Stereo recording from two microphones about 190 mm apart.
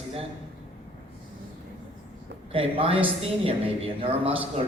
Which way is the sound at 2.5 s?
30° right (ahead or behind).